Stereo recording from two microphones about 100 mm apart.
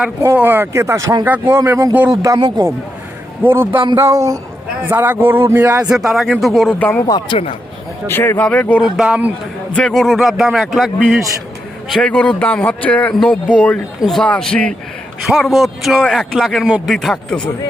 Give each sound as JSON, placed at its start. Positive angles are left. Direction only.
{"t": 0.3, "sound": "a man's voice", "side_deg": -20}
{"t": 2.2, "sound": "speech", "side_deg": -40}
{"t": 3.4, "sound": "a man's voice", "side_deg": -20}
{"t": 3.9, "sound": "speech", "side_deg": -30}
{"t": 4.8, "sound": "a man's voice", "side_deg": -20}
{"t": 5.9, "sound": "a man's voice", "side_deg": -5}
{"t": 6.7, "sound": "a man's voice", "side_deg": 15}
{"t": 8.0, "sound": "a man's voice", "side_deg": 25}
{"t": 8.8, "sound": "speech", "side_deg": -10}
{"t": 9.7, "sound": "a man's voice", "side_deg": 5}
{"t": 11.9, "sound": "a man's voice", "side_deg": 10}
{"t": 14.0, "sound": "a man's voice", "side_deg": 0}